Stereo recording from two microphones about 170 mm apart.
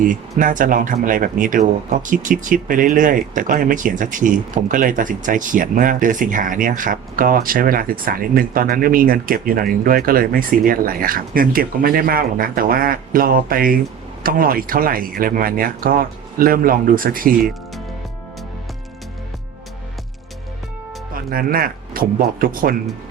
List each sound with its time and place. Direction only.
0.0 s speech: 50° right (ahead or behind)
21.1 s speech: 60° right (ahead or behind)